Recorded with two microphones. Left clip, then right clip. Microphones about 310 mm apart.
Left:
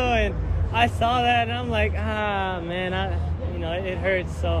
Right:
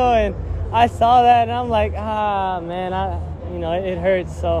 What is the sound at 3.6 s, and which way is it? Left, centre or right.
Speech, right.